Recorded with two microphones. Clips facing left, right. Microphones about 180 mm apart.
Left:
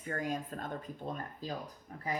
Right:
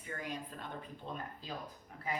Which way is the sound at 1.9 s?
40° left (ahead or behind).